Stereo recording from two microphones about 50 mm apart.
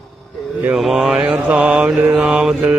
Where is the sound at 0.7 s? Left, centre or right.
Centre.